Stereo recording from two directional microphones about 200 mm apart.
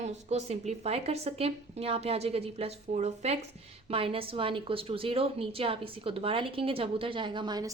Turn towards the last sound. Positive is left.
turn(degrees=-20)  # may be behind; listen again after turning